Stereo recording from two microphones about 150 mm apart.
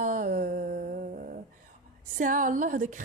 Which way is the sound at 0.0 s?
65° right (ahead or behind).